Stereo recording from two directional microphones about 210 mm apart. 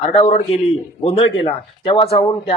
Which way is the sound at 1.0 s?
30° left (ahead or behind).